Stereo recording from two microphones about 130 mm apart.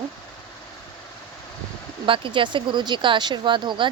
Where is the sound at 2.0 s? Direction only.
40° right (ahead or behind).